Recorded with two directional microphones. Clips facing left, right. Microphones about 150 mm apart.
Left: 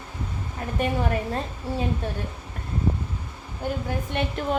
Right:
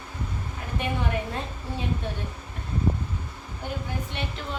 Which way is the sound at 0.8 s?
45° left (ahead or behind).